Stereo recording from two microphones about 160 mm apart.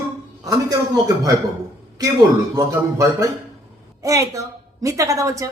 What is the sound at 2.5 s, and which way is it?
A woman's voice, 20° right (ahead or behind).